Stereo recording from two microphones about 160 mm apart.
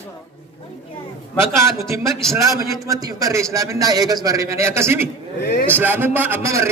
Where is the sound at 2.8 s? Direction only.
20° right (ahead or behind).